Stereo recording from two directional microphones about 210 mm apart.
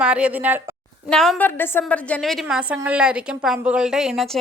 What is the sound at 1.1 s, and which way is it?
A woman's voice, centre (ahead or behind).